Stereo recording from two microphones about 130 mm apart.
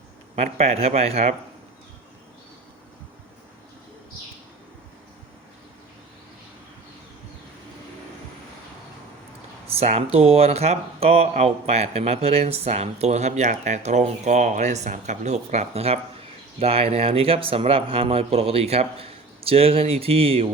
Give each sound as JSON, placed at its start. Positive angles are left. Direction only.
{"t": 0.3, "sound": "speech", "side_deg": -55}
{"t": 9.6, "sound": "speech", "side_deg": -55}